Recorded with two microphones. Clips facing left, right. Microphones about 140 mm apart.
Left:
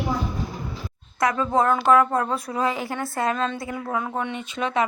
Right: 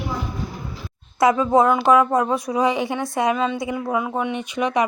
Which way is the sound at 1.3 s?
15° right (ahead or behind).